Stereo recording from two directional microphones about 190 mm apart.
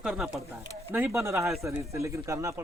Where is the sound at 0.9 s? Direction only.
10° right (ahead or behind).